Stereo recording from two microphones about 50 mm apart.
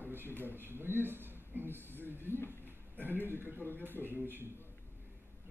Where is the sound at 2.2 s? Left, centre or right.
Left.